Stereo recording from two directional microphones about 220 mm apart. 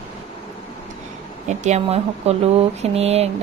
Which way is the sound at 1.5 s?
30° right (ahead or behind).